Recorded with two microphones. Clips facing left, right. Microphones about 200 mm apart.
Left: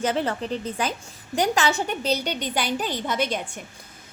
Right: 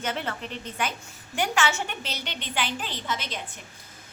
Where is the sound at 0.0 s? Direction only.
35° left (ahead or behind).